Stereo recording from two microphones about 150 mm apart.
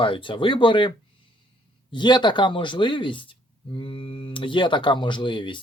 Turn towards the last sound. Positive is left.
turn(degrees=30)  # may be behind; listen again after turning